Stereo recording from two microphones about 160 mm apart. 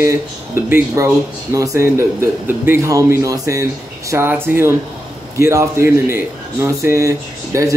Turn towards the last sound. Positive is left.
turn(degrees=-20)  # may be behind; listen again after turning